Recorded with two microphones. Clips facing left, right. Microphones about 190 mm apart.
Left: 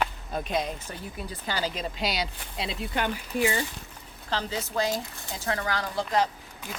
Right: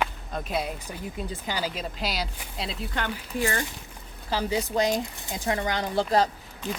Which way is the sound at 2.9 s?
15° left (ahead or behind).